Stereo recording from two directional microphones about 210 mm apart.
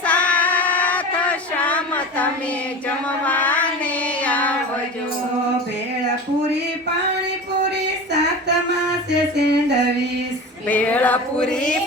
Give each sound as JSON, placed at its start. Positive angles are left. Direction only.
{"t": 0.0, "sound": "child singing", "side_deg": 5}
{"t": 4.2, "sound": "music", "side_deg": 5}
{"t": 9.3, "sound": "music", "side_deg": -55}
{"t": 10.7, "sound": "a sound", "side_deg": 5}